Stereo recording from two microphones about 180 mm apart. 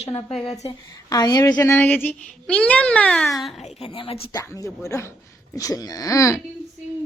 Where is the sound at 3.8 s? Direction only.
30° left (ahead or behind).